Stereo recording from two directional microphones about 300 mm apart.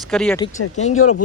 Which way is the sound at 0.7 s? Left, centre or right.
Left.